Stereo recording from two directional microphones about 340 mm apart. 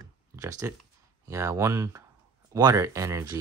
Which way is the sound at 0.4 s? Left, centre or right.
Centre.